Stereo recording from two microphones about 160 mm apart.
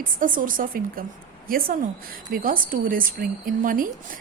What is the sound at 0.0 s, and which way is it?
Speech, 60° right (ahead or behind).